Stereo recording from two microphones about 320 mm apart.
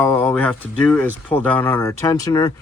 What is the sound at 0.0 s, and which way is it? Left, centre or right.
Speech, centre.